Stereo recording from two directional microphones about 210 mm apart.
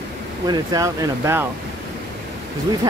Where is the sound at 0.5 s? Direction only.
20° right (ahead or behind).